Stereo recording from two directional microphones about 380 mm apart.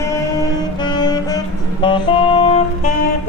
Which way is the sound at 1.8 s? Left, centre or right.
Centre.